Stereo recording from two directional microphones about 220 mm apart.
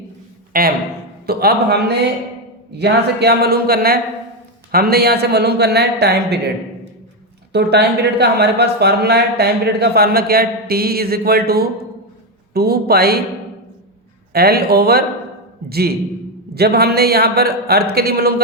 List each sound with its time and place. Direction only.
0.5 s a man's voice: 40° right (ahead or behind)
7.5 s speech: 50° right (ahead or behind)
14.3 s speech: 45° right (ahead or behind)